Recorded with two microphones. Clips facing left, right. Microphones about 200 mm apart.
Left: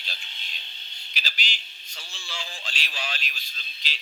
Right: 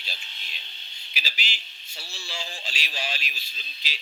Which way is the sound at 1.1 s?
5° right (ahead or behind).